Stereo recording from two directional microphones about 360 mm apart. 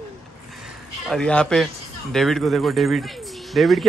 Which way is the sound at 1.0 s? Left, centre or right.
Centre.